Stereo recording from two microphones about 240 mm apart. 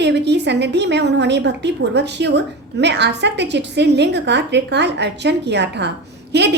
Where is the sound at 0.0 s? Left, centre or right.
Right.